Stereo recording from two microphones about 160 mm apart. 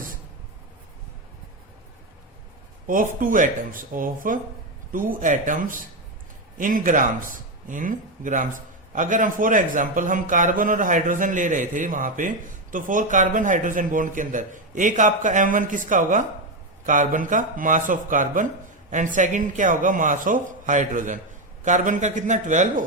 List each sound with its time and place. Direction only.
2.8 s speech: 60° right (ahead or behind)